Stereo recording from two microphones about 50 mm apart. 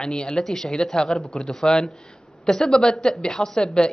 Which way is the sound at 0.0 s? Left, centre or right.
Centre.